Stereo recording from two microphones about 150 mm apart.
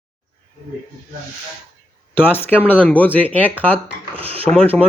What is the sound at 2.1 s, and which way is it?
Speech, 15° left (ahead or behind).